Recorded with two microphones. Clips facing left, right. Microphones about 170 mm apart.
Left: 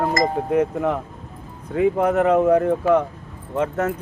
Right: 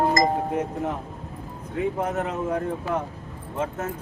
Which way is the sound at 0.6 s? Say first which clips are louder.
Left 7 dB; 65° left (ahead or behind).